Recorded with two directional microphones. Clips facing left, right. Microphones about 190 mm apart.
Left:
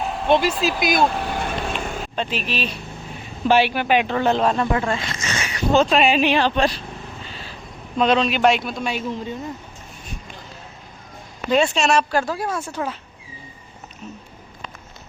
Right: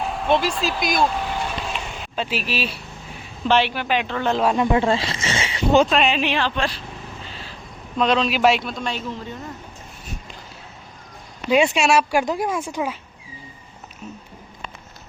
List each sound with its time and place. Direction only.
0.0 s speech: centre (ahead or behind)
1.5 s vehicle: 55° left (ahead or behind)
2.1 s speech: 5° right (ahead or behind)
3.4 s speech: 10° left (ahead or behind)
4.3 s a man's voice: 5° right (ahead or behind)
4.5 s speech: 15° right (ahead or behind)
4.8 s speech: 30° right (ahead or behind)
5.9 s speech: 5° left (ahead or behind)
6.4 s speech: 15° left (ahead or behind)
7.9 s a man's voice: centre (ahead or behind)
11.4 s speech: 10° right (ahead or behind)